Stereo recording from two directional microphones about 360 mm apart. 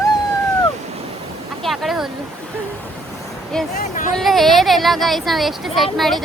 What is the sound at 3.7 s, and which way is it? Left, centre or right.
Speech, left.